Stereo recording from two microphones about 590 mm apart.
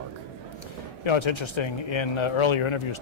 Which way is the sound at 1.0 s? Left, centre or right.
Left.